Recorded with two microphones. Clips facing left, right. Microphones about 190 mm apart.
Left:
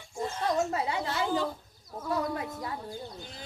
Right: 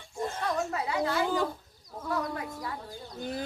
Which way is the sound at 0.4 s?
25° left (ahead or behind).